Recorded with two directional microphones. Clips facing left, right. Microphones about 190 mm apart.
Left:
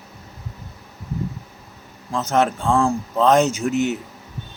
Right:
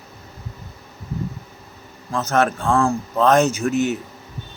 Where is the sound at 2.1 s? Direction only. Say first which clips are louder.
Even; 20° left (ahead or behind).